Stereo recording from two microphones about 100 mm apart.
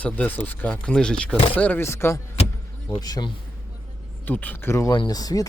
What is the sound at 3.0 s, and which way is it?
Speech, 40° left (ahead or behind).